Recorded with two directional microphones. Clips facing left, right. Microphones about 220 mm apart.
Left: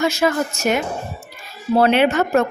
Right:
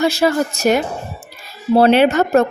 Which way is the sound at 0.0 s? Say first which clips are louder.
Right 3 dB; 35° right (ahead or behind).